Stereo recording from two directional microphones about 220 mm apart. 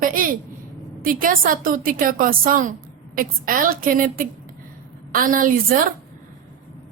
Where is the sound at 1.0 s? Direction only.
40° right (ahead or behind).